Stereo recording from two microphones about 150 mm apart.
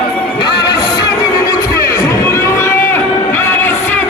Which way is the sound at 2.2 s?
15° left (ahead or behind).